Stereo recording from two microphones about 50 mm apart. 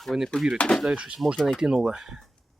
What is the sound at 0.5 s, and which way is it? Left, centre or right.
Speech, centre.